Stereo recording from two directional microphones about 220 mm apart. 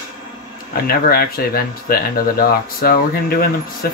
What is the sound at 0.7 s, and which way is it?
Speech, 45° left (ahead or behind).